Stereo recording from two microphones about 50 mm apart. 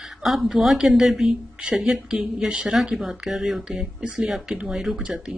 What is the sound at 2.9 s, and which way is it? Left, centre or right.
A woman's voice, centre.